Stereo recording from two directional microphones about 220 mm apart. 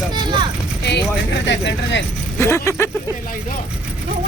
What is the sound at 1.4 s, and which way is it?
Speech, 55° left (ahead or behind).